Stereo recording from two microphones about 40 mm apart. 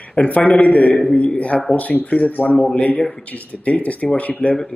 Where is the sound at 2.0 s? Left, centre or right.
Left.